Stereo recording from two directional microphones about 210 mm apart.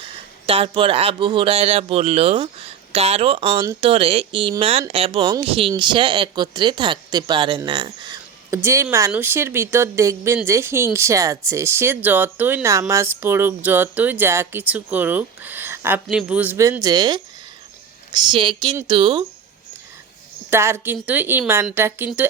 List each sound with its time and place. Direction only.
0.4 s speech: 25° right (ahead or behind)
20.5 s speech: 10° right (ahead or behind)